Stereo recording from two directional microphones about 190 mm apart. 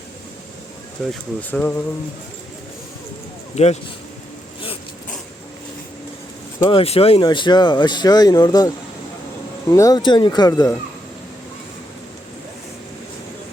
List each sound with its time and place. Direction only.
1.0 s speech: centre (ahead or behind)
3.5 s speech: 35° left (ahead or behind)
6.7 s speech: 30° left (ahead or behind)
9.7 s speech: 20° left (ahead or behind)